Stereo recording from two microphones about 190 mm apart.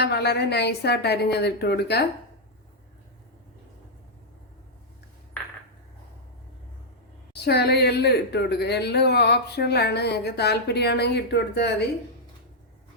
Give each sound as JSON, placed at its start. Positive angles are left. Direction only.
{"t": 0.0, "sound": "speech", "side_deg": 60}
{"t": 7.3, "sound": "speech", "side_deg": 60}